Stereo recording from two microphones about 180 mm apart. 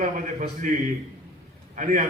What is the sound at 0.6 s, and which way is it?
A man's voice, 45° right (ahead or behind).